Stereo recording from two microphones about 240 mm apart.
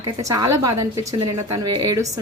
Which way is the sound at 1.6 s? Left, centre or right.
Right.